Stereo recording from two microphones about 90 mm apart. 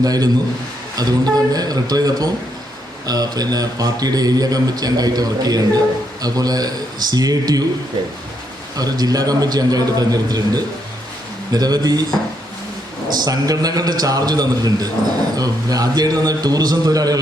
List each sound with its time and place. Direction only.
0.0 s a man's voice: 45° right (ahead or behind)
8.7 s a man's voice: 45° right (ahead or behind)
13.1 s a man's voice: 45° right (ahead or behind)